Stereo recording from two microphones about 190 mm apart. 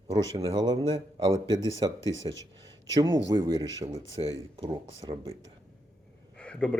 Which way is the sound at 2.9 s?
20° right (ahead or behind).